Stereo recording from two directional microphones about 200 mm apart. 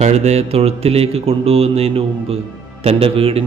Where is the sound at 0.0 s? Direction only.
35° right (ahead or behind).